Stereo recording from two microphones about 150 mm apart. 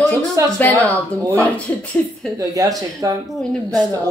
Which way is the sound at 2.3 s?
25° right (ahead or behind).